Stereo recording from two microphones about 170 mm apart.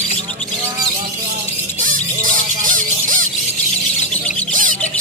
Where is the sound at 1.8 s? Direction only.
50° right (ahead or behind).